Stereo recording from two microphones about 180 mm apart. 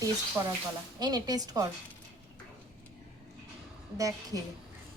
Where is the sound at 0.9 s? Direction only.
20° right (ahead or behind).